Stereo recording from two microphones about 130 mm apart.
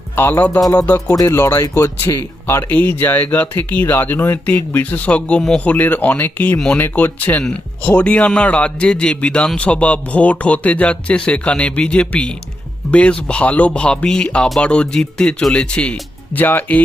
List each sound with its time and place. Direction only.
0.2 s speech: 15° left (ahead or behind)
0.6 s speech: 25° left (ahead or behind)
0.9 s speech: 15° left (ahead or behind)
1.1 s speech: 30° left (ahead or behind); by 16.8 s 10° left (ahead or behind)